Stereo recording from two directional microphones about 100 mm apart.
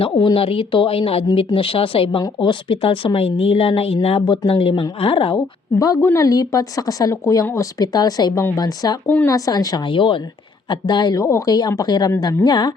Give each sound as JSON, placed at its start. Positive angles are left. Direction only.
{"t": 0.2, "sound": "speech", "side_deg": 65}
{"t": 4.7, "sound": "a woman's voice", "side_deg": 55}
{"t": 5.8, "sound": "a woman's voice", "side_deg": 35}
{"t": 9.0, "sound": "speech", "side_deg": 20}
{"t": 9.3, "sound": "a woman's voice", "side_deg": 35}
{"t": 9.8, "sound": "a woman's voice", "side_deg": 55}